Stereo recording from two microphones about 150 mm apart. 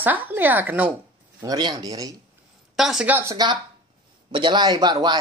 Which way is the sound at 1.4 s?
25° right (ahead or behind).